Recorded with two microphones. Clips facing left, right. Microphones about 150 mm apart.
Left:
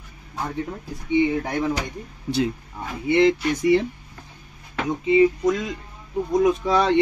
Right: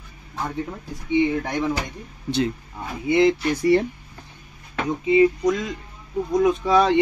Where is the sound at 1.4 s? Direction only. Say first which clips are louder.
Even; 10° left (ahead or behind).